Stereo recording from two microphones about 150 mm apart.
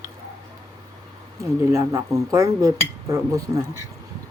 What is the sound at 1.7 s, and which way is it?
Speech, 20° right (ahead or behind).